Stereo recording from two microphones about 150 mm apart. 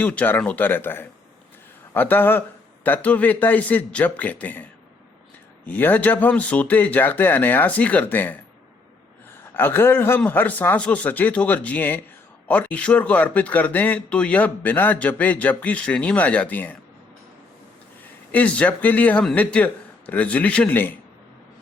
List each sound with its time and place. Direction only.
0.0 s speech: 10° left (ahead or behind)
5.6 s speech: 10° left (ahead or behind)
9.6 s speech: 15° left (ahead or behind)
18.3 s speech: 10° left (ahead or behind)